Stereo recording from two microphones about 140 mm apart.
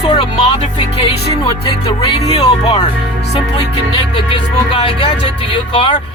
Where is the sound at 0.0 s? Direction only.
40° left (ahead or behind).